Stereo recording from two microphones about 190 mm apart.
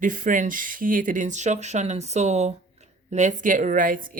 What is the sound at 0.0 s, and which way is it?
Speech, 45° right (ahead or behind).